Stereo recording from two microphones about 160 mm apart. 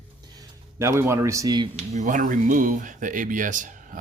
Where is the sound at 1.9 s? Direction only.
55° right (ahead or behind).